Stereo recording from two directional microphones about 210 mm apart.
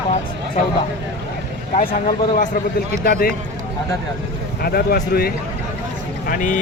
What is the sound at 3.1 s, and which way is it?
Speech, 45° left (ahead or behind).